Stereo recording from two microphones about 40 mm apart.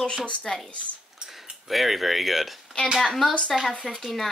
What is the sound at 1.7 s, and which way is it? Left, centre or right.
Speech, centre.